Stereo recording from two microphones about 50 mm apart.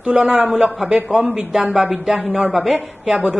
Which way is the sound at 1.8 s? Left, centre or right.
Centre.